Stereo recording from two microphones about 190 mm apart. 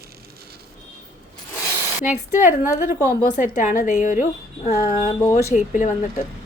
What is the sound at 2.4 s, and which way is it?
A woman's voice, 40° left (ahead or behind).